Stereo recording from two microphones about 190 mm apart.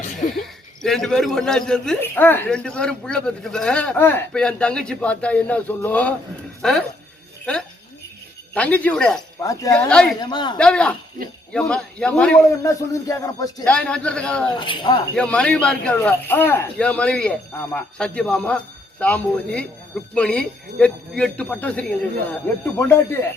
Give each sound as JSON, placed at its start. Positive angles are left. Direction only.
{"t": 0.3, "sound": "a man's voice", "side_deg": 0}
{"t": 8.5, "sound": "speech", "side_deg": 5}
{"t": 9.4, "sound": "speech", "side_deg": 15}
{"t": 9.7, "sound": "a man's voice", "side_deg": 5}
{"t": 10.2, "sound": "a man's voice", "side_deg": 25}
{"t": 10.6, "sound": "a man's voice", "side_deg": 5}
{"t": 12.6, "sound": "speech", "side_deg": 15}
{"t": 13.7, "sound": "a man's voice", "side_deg": 5}
{"t": 14.6, "sound": "a man's voice", "side_deg": 25}
{"t": 15.1, "sound": "a man's voice", "side_deg": 5}